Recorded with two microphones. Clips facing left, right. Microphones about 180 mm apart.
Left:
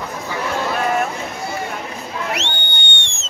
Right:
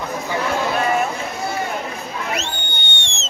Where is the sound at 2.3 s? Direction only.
80° left.